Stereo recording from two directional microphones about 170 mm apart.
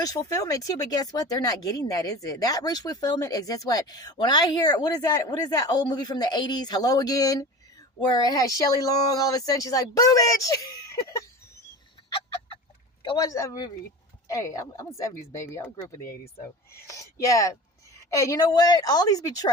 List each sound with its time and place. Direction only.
0.0 s speech: 20° left (ahead or behind)
13.0 s speech: 25° left (ahead or behind)
16.8 s speech: 20° left (ahead or behind)